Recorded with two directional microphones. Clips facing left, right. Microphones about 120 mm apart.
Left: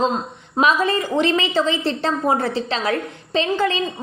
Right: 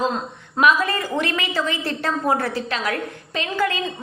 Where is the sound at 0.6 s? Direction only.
25° left (ahead or behind).